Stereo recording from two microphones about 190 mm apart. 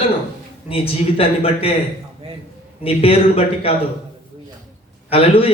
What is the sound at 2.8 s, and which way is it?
Speech, 30° left (ahead or behind).